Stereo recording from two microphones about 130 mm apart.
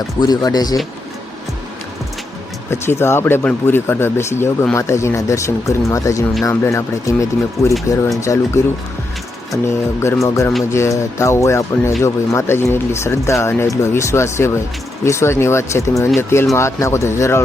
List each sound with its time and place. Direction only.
0.2 s speech: 30° left (ahead or behind)
2.6 s speech: 20° left (ahead or behind)
9.6 s speech: 20° left (ahead or behind)